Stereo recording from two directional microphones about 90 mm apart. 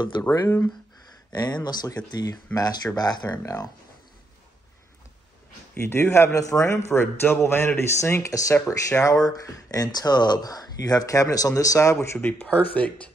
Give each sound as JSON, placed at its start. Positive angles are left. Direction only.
{"t": 1.3, "sound": "speech", "side_deg": 50}
{"t": 5.8, "sound": "a man's voice", "side_deg": 30}
{"t": 12.2, "sound": "a man's voice", "side_deg": 20}